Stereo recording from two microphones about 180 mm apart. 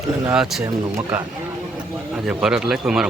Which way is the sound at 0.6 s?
15° right (ahead or behind).